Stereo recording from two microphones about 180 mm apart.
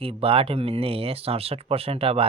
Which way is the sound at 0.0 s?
30° right (ahead or behind).